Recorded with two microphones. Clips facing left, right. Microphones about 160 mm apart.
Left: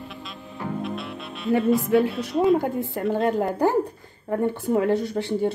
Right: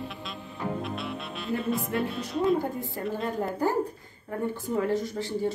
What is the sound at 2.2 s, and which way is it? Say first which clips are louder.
Speech: left 5 dB; 75° left (ahead or behind).